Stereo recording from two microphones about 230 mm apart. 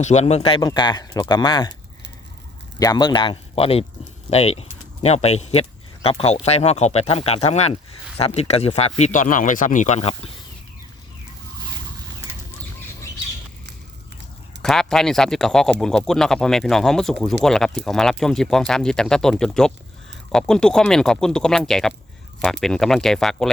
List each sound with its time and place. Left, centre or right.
0.0 s speech: left
2.7 s speech: centre
14.6 s speech: centre